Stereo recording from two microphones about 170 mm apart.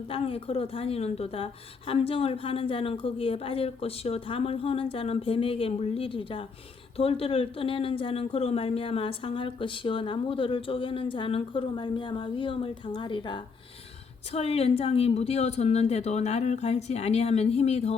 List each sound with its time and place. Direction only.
0.1 s speech: 35° left (ahead or behind)